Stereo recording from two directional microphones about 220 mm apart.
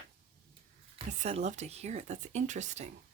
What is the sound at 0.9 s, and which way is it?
Speech, 30° right (ahead or behind).